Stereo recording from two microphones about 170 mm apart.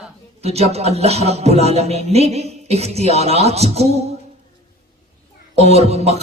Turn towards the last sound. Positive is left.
turn(degrees=-40)  # may be behind; listen again after turning